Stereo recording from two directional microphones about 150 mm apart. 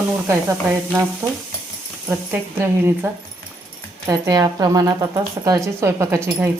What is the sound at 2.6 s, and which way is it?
Speech, 15° right (ahead or behind).